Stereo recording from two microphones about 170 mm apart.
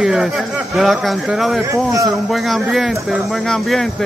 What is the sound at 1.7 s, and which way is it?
Speech, 20° right (ahead or behind).